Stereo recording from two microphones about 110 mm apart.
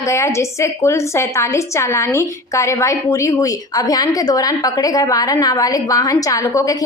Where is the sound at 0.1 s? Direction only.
25° left (ahead or behind).